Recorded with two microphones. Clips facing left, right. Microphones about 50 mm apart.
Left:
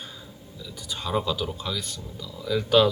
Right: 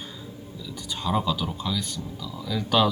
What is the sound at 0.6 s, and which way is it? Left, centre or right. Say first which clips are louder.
Speech: right 2 dB; centre.